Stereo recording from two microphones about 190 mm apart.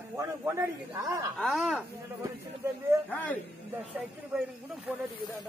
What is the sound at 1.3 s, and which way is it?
Speech, 5° left (ahead or behind).